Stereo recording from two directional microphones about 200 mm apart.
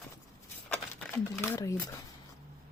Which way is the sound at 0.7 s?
10° left (ahead or behind).